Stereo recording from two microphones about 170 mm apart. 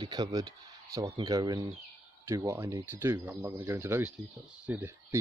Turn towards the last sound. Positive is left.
turn(degrees=-15)  # may be behind; listen again after turning